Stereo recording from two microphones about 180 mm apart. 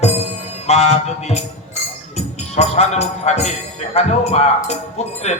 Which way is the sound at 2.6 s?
40° left (ahead or behind).